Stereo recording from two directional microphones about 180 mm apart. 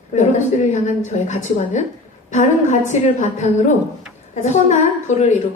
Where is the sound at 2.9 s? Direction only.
40° left (ahead or behind).